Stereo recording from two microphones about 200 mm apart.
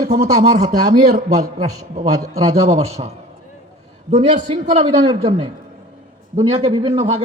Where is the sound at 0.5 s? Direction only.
20° right (ahead or behind).